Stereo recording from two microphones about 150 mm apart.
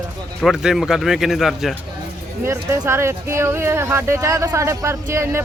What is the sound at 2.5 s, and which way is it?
Speech, 15° right (ahead or behind).